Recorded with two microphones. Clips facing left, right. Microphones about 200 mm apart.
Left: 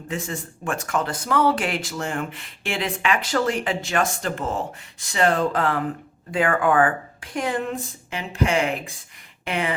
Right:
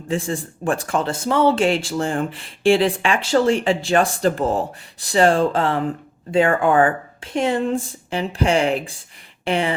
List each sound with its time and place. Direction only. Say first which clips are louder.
0.1 s speech: right 7 dB; 30° right (ahead or behind)